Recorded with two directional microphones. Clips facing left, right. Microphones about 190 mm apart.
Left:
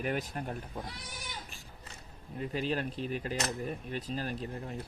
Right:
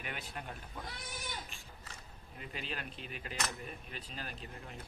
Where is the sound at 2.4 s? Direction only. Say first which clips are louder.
Left 11 dB; 35° left (ahead or behind).